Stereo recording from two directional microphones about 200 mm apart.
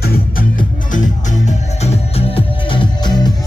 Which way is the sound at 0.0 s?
45° left (ahead or behind).